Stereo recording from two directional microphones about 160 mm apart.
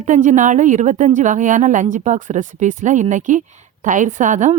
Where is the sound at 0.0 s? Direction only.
50° right (ahead or behind).